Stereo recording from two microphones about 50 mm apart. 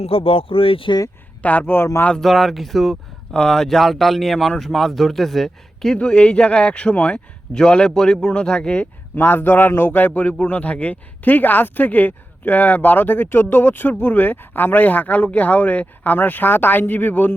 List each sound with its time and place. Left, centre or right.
1.4 s speech: left
2.2 s speech: centre
5.9 s speech: centre
6.9 s speech: left
7.5 s a man's voice: centre
8.8 s speech: left